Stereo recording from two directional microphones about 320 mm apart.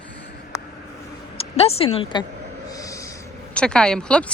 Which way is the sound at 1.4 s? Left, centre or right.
Centre.